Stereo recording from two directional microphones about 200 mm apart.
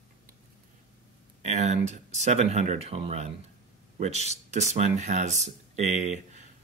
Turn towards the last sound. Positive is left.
turn(degrees=-35)  # may be behind; listen again after turning